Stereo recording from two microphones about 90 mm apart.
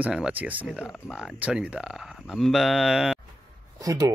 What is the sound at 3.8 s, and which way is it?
Speech, 40° right (ahead or behind).